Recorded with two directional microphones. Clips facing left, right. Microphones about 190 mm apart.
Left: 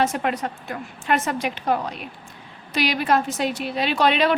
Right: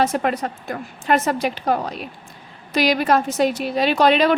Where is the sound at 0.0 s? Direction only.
40° right (ahead or behind).